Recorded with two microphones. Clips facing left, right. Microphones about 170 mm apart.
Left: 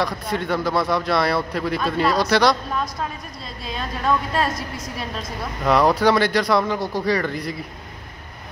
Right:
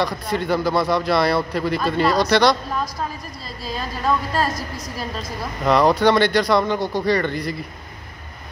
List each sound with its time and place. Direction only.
0.0 s a man's voice: centre (ahead or behind)
4.5 s a woman's voice: 25° left (ahead or behind)
5.6 s a man's voice: 5° left (ahead or behind)